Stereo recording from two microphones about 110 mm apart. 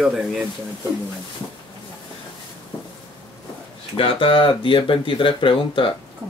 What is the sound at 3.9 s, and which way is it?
Speech, 55° left (ahead or behind).